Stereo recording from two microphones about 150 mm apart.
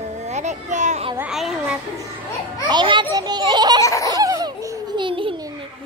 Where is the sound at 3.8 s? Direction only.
20° left (ahead or behind).